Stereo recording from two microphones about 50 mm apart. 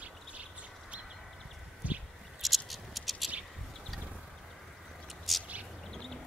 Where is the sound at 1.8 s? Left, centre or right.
Right.